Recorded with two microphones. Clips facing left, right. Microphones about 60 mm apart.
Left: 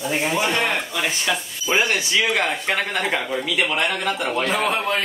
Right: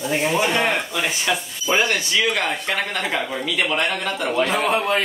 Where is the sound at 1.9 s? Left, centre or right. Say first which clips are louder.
Even; centre.